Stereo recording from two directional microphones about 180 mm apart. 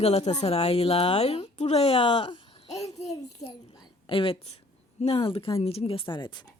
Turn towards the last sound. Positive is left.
turn(degrees=25)  # may be behind; listen again after turning